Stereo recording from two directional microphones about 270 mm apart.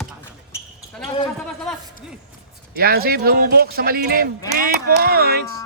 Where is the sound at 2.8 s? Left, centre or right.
Right.